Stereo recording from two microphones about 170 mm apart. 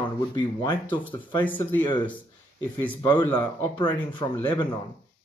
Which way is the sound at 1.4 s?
10° left (ahead or behind).